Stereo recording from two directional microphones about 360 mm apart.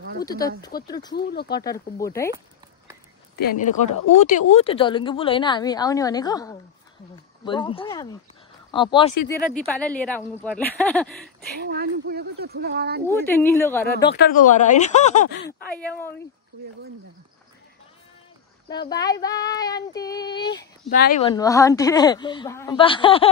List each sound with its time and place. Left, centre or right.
0.2 s a woman's voice: centre
1.1 s speech: left
1.5 s a woman's voice: centre
4.2 s a woman's voice: centre
9.1 s speech: left
9.8 s a woman's voice: centre
11.6 s speech: right
13.0 s a woman's voice: centre
13.8 s speech: left
15.8 s a woman's voice: centre
18.7 s a woman's voice: centre
20.9 s a woman's voice: left